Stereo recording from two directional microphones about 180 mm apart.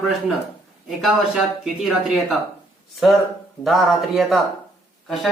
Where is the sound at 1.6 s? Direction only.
Centre (ahead or behind).